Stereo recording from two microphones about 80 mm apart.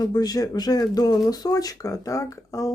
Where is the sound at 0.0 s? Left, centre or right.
Left.